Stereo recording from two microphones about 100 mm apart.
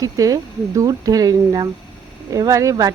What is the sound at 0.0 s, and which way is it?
A woman's voice, 35° right (ahead or behind).